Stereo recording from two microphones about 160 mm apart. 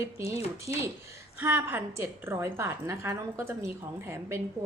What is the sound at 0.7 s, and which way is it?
A woman's voice, 20° right (ahead or behind).